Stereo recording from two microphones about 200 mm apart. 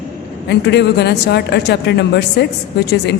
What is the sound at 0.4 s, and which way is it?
A woman's voice, 60° left (ahead or behind).